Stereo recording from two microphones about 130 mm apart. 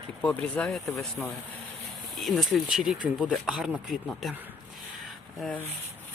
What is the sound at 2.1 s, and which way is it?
Speech, centre (ahead or behind).